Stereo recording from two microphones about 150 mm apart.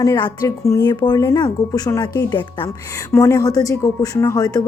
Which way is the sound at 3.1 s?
20° left (ahead or behind).